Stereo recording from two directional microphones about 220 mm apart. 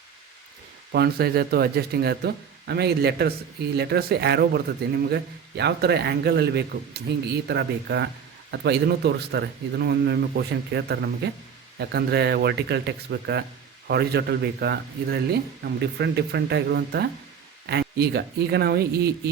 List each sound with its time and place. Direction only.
0.9 s speech: 45° right (ahead or behind)